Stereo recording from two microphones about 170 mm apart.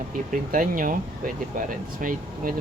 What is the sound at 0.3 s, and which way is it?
Speech, 55° right (ahead or behind).